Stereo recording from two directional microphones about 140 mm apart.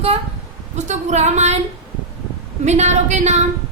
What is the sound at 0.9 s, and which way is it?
Speech, 55° right (ahead or behind).